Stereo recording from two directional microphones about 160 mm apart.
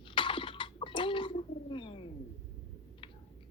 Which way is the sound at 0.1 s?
30° left (ahead or behind).